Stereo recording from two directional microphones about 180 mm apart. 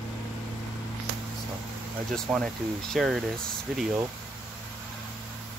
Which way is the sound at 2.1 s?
5° left (ahead or behind).